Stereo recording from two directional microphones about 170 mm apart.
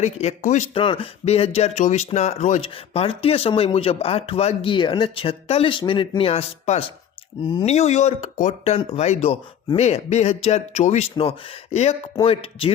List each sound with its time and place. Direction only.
0.0 s speech: 40° left (ahead or behind)
0.8 s speech: 30° left (ahead or behind)
7.7 s speech: 40° left (ahead or behind)